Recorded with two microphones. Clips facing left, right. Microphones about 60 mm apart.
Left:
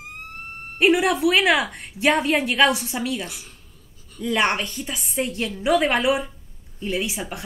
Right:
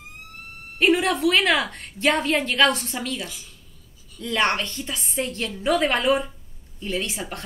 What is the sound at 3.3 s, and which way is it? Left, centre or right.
Speech, left.